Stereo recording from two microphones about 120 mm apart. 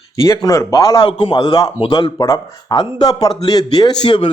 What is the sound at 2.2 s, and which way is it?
Speech, 25° left (ahead or behind).